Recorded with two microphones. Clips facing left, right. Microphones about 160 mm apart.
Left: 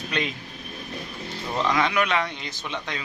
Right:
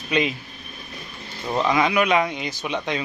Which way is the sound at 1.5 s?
10° right (ahead or behind).